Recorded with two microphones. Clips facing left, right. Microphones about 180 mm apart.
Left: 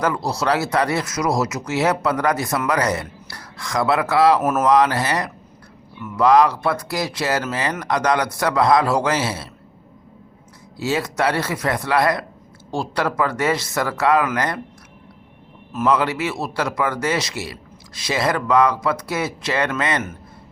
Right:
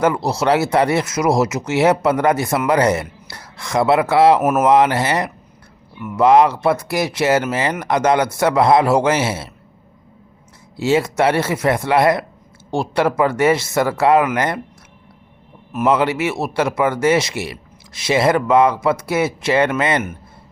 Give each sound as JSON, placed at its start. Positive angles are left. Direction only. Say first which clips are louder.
{"t": 0.0, "sound": "speech", "louder": "right 4 dB", "side_deg": -25}
{"t": 6.0, "sound": "speech", "louder": "right 4 dB", "side_deg": -15}
{"t": 6.2, "sound": "speech", "louder": "right 3 dB", "side_deg": -25}
{"t": 10.8, "sound": "speech", "louder": "right 5 dB", "side_deg": -25}
{"t": 15.7, "sound": "speech", "louder": "right 3 dB", "side_deg": -25}